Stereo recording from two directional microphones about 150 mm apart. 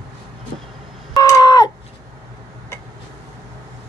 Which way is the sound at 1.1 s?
25° left (ahead or behind).